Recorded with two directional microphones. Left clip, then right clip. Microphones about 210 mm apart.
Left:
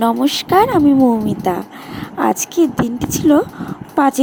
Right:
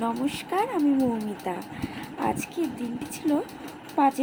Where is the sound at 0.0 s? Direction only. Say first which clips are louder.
Left 13 dB; 40° left (ahead or behind).